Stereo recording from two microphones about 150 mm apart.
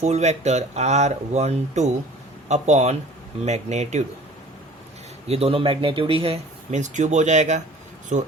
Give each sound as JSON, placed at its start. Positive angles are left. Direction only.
{"t": 0.0, "sound": "speech", "side_deg": -50}
{"t": 5.3, "sound": "speech", "side_deg": -40}